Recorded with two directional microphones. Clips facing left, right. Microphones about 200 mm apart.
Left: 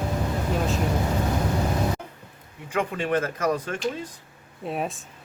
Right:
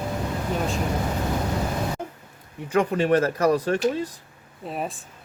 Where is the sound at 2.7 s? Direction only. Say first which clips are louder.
Right 5 dB; 40° right (ahead or behind).